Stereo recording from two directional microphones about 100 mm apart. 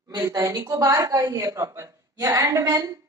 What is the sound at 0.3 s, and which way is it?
A woman's voice, 35° right (ahead or behind).